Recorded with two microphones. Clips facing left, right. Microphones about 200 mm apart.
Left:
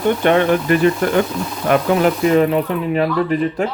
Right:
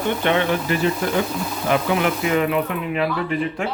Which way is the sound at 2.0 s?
35° left (ahead or behind).